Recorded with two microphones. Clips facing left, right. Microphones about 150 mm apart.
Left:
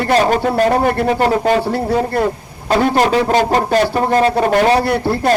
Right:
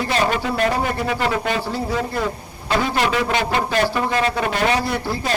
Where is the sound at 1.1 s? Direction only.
40° left (ahead or behind).